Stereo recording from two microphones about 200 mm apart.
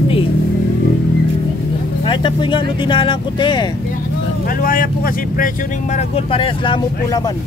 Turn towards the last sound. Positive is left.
turn(degrees=20)  # may be behind; listen again after turning